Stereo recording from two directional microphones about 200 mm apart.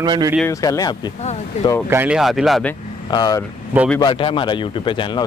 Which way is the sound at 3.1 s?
20° left (ahead or behind).